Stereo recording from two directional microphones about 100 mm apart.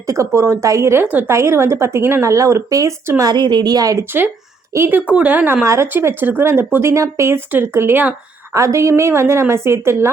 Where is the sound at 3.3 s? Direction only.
50° right (ahead or behind).